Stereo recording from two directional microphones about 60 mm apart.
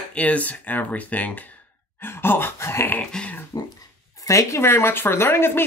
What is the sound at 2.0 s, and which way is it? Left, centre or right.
Speech, left.